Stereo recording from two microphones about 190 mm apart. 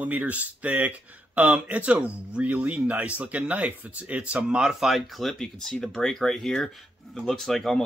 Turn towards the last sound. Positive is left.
turn(degrees=0)  # may be behind; listen again after turning